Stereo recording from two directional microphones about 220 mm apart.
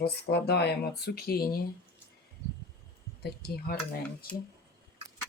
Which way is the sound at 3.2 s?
45° left (ahead or behind).